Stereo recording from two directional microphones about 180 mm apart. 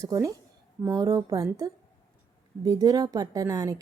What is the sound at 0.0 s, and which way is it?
A woman's voice, 20° right (ahead or behind).